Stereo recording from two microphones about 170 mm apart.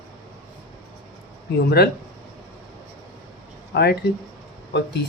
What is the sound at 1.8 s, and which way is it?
Speech, 65° left (ahead or behind).